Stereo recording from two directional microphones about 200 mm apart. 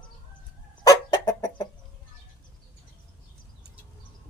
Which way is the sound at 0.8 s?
20° left (ahead or behind).